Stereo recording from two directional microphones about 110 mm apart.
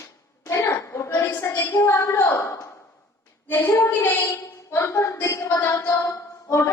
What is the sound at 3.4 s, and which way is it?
A woman's voice, 25° left (ahead or behind).